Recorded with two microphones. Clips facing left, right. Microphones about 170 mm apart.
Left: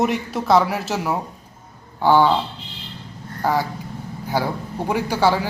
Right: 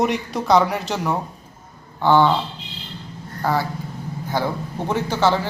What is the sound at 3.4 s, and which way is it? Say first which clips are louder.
Speech: left 1 dB; 15° left (ahead or behind).